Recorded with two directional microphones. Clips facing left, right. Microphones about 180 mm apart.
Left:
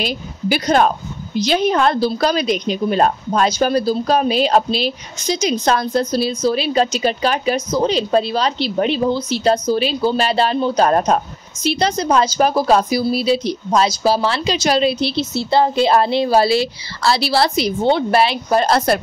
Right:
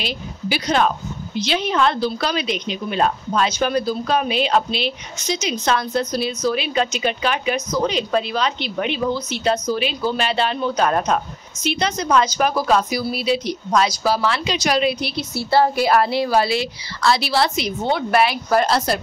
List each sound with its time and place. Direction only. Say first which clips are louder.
0.0 s a woman's voice: left 5 dB; 45° left (ahead or behind); by 18.7 s 25° left (ahead or behind)
18.7 s a woman's voice: left 4 dB; 55° left (ahead or behind)